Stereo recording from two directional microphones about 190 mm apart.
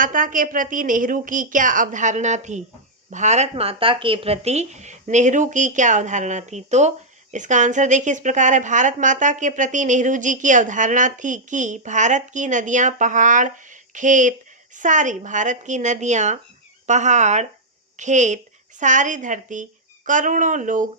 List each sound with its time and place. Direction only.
0.0 s a woman's voice: 45° right (ahead or behind)